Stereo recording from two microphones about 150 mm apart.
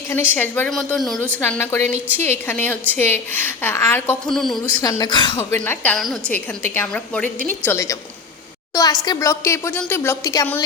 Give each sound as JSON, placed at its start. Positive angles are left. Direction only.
{"t": 0.1, "sound": "a woman's voice", "side_deg": 15}
{"t": 0.7, "sound": "speech", "side_deg": 0}
{"t": 1.3, "sound": "a woman's voice", "side_deg": 15}
{"t": 4.4, "sound": "speech", "side_deg": 0}
{"t": 4.7, "sound": "a woman's voice", "side_deg": 25}
{"t": 5.5, "sound": "a woman's voice", "side_deg": 10}